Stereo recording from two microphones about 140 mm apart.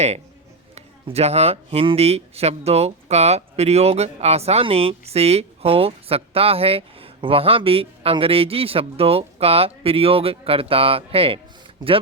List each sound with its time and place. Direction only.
0.8 s speech: 50° right (ahead or behind)